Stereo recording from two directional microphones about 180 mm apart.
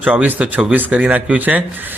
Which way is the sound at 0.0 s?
10° right (ahead or behind).